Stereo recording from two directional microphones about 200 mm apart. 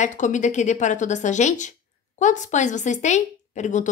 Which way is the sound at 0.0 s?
40° left (ahead or behind).